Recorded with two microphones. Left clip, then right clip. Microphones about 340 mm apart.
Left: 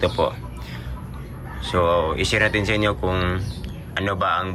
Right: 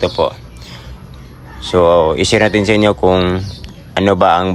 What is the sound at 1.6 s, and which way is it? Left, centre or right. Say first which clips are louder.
Speech: right 10 dB; centre.